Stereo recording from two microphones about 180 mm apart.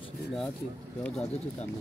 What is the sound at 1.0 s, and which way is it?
Speech, 5° left (ahead or behind).